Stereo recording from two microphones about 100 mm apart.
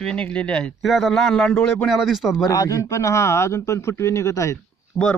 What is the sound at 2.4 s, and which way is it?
Speech, 35° left (ahead or behind).